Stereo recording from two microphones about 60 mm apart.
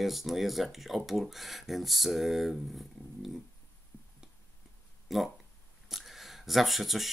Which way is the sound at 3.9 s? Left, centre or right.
Left.